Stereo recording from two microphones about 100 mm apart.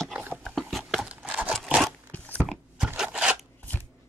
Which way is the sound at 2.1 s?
20° left (ahead or behind).